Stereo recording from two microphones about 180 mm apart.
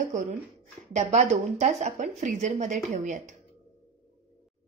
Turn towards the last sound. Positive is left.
turn(degrees=-45)  # may be behind; listen again after turning